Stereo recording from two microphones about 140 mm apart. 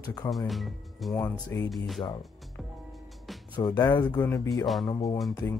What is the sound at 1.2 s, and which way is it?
Speech, 15° left (ahead or behind).